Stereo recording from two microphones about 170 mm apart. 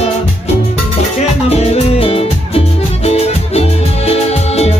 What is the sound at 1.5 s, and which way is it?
Music, 40° left (ahead or behind).